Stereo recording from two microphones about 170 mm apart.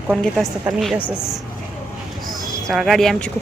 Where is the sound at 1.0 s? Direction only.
15° left (ahead or behind).